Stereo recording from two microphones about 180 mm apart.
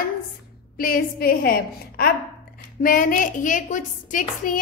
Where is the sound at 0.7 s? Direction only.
55° left (ahead or behind).